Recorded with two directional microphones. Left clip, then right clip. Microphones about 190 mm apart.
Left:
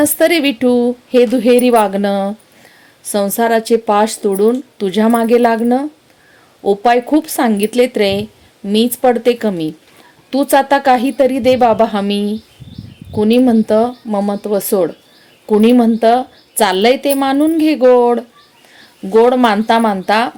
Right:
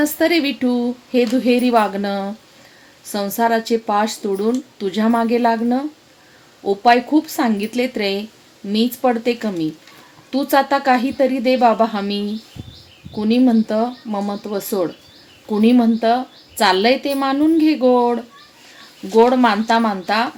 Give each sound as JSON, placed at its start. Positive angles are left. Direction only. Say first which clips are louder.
{"t": 0.0, "sound": "speech", "louder": "left 5 dB", "side_deg": 45}